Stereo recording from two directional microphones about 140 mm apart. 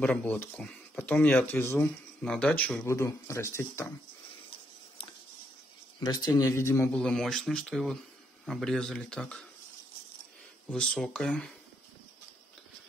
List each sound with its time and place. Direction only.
0.0 s speech: 10° left (ahead or behind)
5.9 s a man's voice: 30° left (ahead or behind)
6.9 s speech: 5° left (ahead or behind)
10.7 s speech: 5° left (ahead or behind)